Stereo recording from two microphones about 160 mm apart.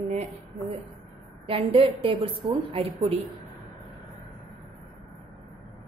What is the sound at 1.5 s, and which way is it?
A woman's voice, 35° right (ahead or behind).